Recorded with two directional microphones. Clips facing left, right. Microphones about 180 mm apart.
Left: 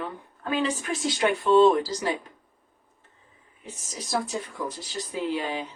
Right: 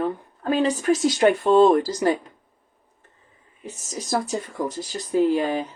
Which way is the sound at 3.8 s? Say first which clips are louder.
Right 4 dB; 45° right (ahead or behind).